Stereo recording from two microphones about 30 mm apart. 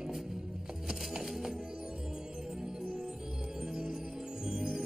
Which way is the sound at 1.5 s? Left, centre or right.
Right.